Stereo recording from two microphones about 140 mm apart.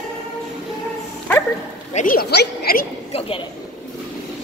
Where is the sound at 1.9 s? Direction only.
85° left.